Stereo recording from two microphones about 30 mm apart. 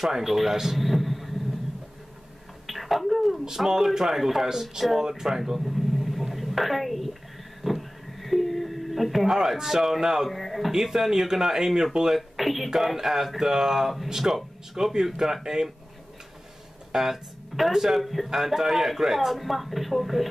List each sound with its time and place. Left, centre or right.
0.0 s a man's voice: centre
2.6 s a sound: centre
3.5 s speech: centre
5.4 s a sound: centre
9.2 s speech: centre
10.3 s speech: centre
10.7 s speech: centre
12.1 s speech: centre
12.7 s speech: centre
16.9 s speech: centre
18.3 s speech: centre